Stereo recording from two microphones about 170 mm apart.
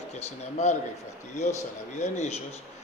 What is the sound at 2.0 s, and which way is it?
Speech, 40° left (ahead or behind).